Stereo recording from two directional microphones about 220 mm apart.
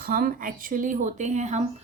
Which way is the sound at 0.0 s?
40° right (ahead or behind).